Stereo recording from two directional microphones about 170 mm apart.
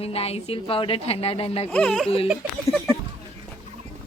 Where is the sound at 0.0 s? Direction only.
35° left (ahead or behind).